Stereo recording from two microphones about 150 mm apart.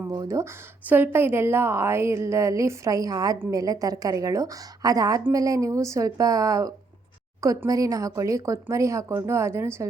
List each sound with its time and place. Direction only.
0.1 s speech: 25° right (ahead or behind)
0.9 s a woman's voice: 15° right (ahead or behind)